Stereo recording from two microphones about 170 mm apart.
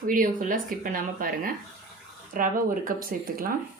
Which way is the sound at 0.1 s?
55° right (ahead or behind).